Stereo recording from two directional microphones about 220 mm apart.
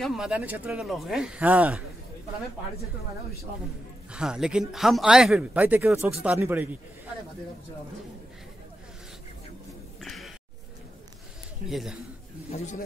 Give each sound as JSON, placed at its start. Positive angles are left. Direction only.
{"t": 0.0, "sound": "speech", "side_deg": 0}
{"t": 4.1, "sound": "speech", "side_deg": -5}
{"t": 9.9, "sound": "a sound", "side_deg": 0}
{"t": 11.7, "sound": "speech", "side_deg": 0}
{"t": 12.4, "sound": "speech", "side_deg": 30}